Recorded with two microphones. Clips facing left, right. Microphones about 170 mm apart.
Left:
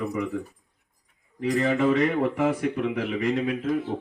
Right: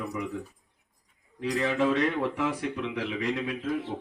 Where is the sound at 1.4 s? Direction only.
55° left (ahead or behind).